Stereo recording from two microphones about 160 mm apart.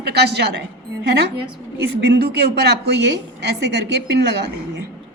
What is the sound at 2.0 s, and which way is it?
Speech, 85° right.